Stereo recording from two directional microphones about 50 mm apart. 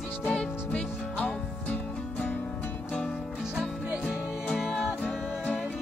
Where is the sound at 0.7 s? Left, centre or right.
Left.